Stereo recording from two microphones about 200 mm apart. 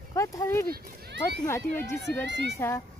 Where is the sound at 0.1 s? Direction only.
15° left (ahead or behind).